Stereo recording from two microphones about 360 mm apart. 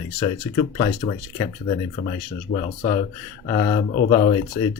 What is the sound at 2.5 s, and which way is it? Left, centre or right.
Speech, centre.